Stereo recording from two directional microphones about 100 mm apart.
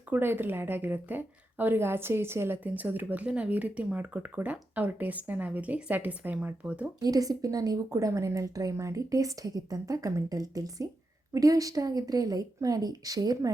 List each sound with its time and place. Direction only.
0.1 s a woman's voice: 20° right (ahead or behind)
7.0 s a woman's voice: 40° right (ahead or behind)